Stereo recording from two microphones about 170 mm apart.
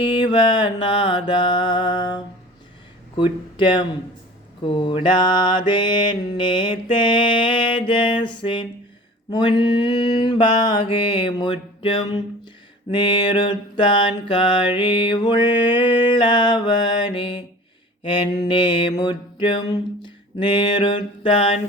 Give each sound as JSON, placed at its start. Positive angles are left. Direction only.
{"t": 0.0, "sound": "mantra", "side_deg": 25}
{"t": 3.2, "sound": "speech", "side_deg": 30}
{"t": 4.6, "sound": "mantra", "side_deg": 30}